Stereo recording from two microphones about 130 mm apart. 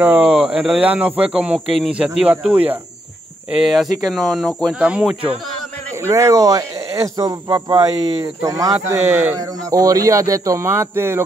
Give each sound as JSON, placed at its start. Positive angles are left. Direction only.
{"t": 0.0, "sound": "speech", "side_deg": -10}
{"t": 5.9, "sound": "speech", "side_deg": -20}